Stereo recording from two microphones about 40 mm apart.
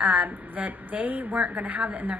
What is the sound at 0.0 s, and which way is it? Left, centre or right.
A woman's voice, right.